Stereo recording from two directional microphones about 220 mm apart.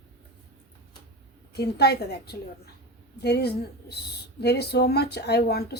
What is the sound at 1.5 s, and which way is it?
A woman's voice, 45° left (ahead or behind).